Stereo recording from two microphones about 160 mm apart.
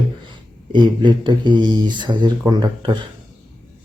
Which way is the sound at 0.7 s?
30° right (ahead or behind).